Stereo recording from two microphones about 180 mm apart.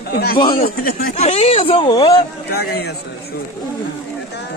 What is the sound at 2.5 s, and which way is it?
Speech, 60° left (ahead or behind).